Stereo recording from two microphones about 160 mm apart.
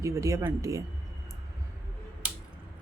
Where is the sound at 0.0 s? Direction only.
20° right (ahead or behind).